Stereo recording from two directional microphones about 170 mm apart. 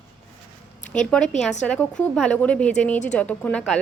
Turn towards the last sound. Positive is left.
turn(degrees=5)  # may be behind; listen again after turning